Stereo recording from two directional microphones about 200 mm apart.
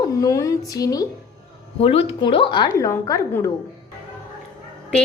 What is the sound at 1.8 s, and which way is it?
A woman's voice, 30° left (ahead or behind).